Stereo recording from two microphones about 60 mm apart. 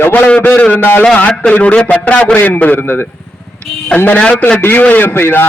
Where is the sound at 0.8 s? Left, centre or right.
Left.